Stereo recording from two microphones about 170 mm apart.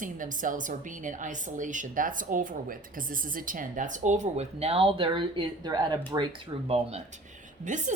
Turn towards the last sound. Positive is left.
turn(degrees=-45)  # may be behind; listen again after turning